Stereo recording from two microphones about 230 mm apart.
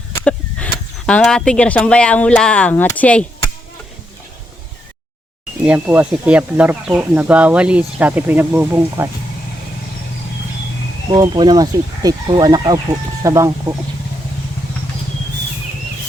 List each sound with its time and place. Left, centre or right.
1.0 s speech: centre
5.6 s speech: centre
11.1 s speech: centre